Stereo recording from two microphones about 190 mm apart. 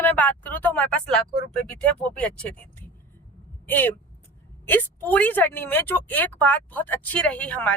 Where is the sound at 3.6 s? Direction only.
10° left (ahead or behind).